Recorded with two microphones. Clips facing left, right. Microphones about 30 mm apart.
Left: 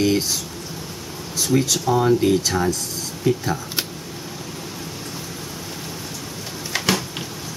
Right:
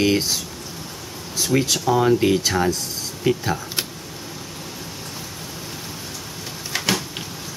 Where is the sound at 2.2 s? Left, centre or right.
Centre.